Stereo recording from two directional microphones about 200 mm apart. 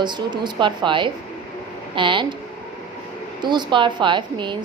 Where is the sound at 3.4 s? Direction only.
20° right (ahead or behind).